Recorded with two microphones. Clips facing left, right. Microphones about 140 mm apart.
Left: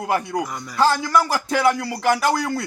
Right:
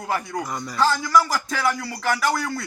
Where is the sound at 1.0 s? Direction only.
25° left (ahead or behind).